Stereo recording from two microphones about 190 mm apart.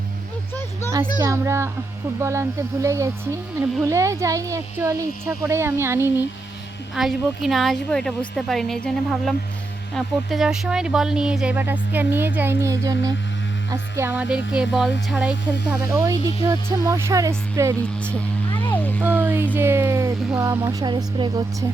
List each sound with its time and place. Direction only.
1.2 s speech: 15° right (ahead or behind)
6.9 s speech: centre (ahead or behind); by 17.7 s 15° right (ahead or behind)
18.6 s music: 10° left (ahead or behind)
19.0 s a sound: 10° right (ahead or behind)
19.5 s speech: 10° right (ahead or behind)